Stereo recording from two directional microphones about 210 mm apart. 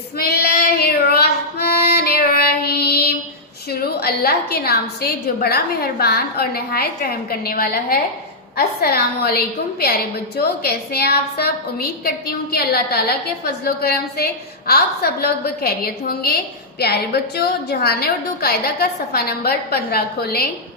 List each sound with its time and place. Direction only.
0.2 s child singing: 50° left (ahead or behind)
3.7 s a woman's voice: 50° left (ahead or behind)